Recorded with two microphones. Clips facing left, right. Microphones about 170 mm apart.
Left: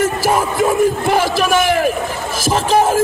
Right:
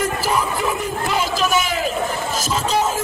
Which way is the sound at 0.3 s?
50° left (ahead or behind).